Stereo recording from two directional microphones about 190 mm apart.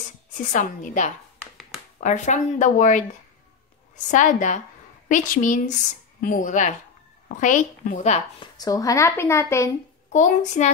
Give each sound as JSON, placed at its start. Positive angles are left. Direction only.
{"t": 0.5, "sound": "speech", "side_deg": 40}
{"t": 4.1, "sound": "a woman's voice", "side_deg": 40}
{"t": 8.5, "sound": "a woman's voice", "side_deg": 20}
{"t": 10.1, "sound": "speech", "side_deg": 40}